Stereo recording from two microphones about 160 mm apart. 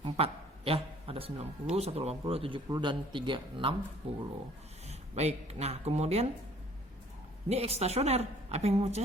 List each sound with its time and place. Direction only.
0.0 s a man's voice: 35° right (ahead or behind)
2.6 s a man's voice: 25° right (ahead or behind)
4.9 s speech: 45° right (ahead or behind)
7.4 s a woman's voice: 40° right (ahead or behind)